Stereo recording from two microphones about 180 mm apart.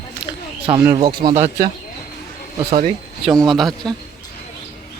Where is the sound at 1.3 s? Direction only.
40° right (ahead or behind).